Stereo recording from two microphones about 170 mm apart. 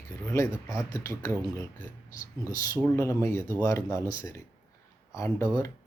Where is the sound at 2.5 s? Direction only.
20° left (ahead or behind).